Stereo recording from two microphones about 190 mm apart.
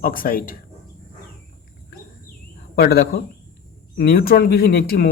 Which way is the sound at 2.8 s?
55° left (ahead or behind).